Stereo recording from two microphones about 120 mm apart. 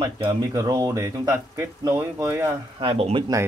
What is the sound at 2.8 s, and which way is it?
Speech, 50° right (ahead or behind).